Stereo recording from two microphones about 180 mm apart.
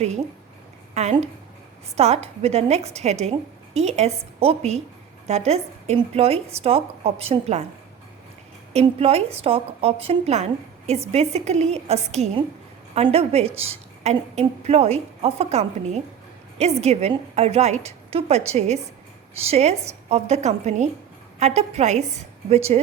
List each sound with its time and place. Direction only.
0.9 s a woman's voice: 40° right (ahead or behind)
8.7 s a woman's voice: 35° right (ahead or behind)